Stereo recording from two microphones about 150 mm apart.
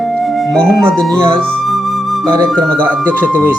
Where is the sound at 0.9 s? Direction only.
5° left (ahead or behind).